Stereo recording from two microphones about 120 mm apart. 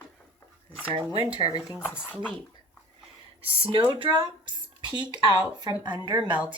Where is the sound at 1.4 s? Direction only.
30° left (ahead or behind).